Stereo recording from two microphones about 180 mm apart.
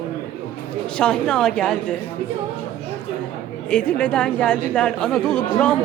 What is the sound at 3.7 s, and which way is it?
Speech, 5° left (ahead or behind).